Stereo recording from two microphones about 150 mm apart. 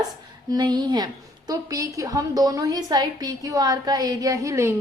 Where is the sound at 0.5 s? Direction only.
30° right (ahead or behind).